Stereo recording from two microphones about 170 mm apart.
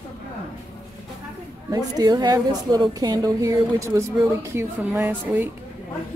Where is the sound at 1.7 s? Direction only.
20° right (ahead or behind).